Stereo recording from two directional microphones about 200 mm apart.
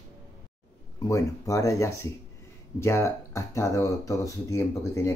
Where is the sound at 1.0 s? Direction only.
15° left (ahead or behind).